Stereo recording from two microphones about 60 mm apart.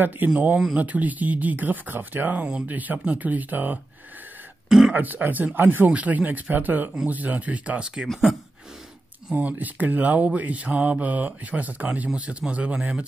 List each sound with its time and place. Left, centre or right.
0.2 s speech: right
4.6 s speech: centre
4.9 s speech: right
7.8 s speech: centre
9.3 s speech: right